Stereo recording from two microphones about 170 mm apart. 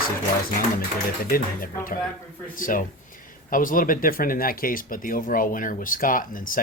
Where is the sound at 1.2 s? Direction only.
60° left (ahead or behind).